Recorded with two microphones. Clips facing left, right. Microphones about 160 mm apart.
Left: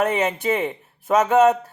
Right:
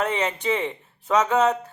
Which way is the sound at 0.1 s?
5° left (ahead or behind).